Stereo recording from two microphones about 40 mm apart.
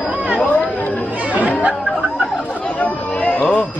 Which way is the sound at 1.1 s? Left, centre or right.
Right.